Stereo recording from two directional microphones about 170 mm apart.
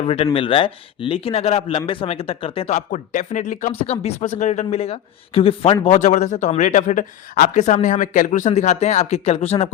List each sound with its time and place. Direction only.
0.0 s speech: 35° left (ahead or behind)
3.8 s speech: 35° left (ahead or behind)
6.0 s speech: 45° left (ahead or behind)